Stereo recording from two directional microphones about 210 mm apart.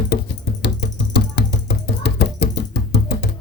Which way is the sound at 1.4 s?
55° left (ahead or behind).